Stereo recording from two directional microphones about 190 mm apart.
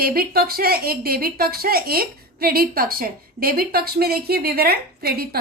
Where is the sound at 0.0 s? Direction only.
50° right (ahead or behind).